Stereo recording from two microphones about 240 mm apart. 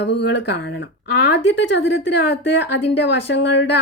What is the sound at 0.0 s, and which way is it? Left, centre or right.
Speech, left.